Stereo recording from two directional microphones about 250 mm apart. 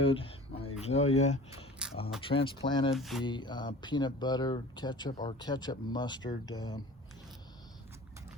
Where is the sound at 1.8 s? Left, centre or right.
Centre.